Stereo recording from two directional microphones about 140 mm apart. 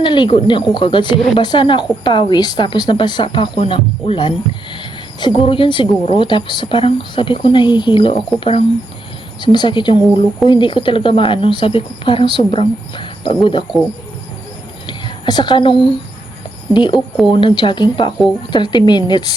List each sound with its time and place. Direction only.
0.0 s speech: 35° left (ahead or behind)
14.8 s speech: 35° left (ahead or behind)